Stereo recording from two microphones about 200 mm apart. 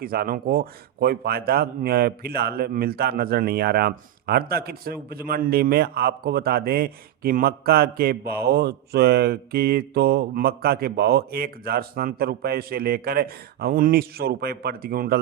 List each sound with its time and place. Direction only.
0.0 s a man's voice: 45° right (ahead or behind)